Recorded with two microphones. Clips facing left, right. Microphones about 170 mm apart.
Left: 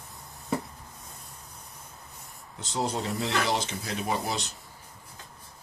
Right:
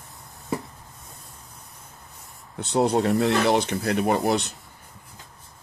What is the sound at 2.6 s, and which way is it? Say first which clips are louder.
Speech: right 9 dB; 65° right (ahead or behind).